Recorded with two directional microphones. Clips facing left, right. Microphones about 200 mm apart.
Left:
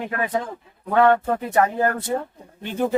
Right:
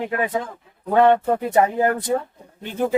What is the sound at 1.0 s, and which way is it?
Speech, 20° right (ahead or behind).